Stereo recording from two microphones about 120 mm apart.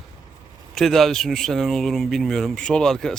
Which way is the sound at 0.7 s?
Centre (ahead or behind).